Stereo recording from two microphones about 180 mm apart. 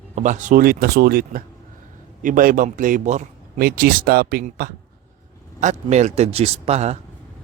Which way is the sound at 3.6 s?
55° right (ahead or behind).